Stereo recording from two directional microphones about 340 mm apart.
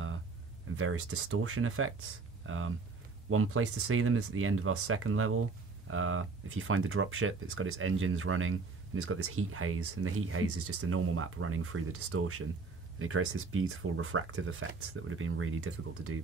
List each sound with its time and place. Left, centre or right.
0.7 s speech: right